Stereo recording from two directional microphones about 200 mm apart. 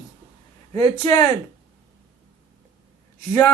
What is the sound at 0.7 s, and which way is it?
Speech, 15° left (ahead or behind).